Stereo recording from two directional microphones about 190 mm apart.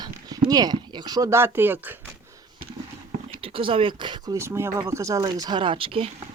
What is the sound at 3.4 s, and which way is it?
Speech, 30° right (ahead or behind).